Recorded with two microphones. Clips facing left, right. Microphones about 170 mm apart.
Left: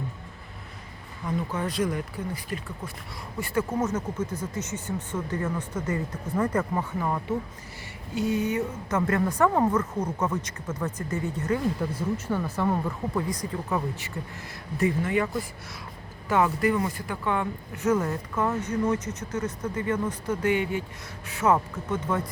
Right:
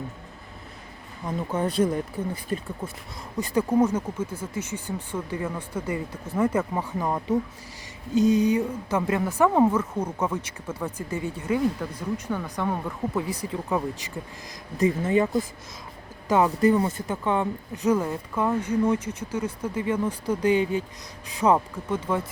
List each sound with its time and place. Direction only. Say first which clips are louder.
1.2 s speech: right 2 dB; 25° right (ahead or behind)
11.8 s speech: left 2 dB; 5° left (ahead or behind)
13.5 s speech: right 2 dB; 10° right (ahead or behind)
14.8 s speech: right 3 dB; 25° right (ahead or behind)
16.4 s speech: right 3 dB; 25° right (ahead or behind); by 22.3 s 10° right (ahead or behind)